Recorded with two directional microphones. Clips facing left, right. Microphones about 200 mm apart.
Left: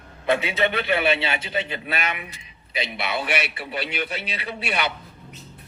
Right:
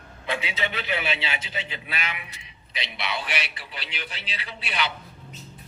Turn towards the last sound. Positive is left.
turn(degrees=55)  # may be behind; listen again after turning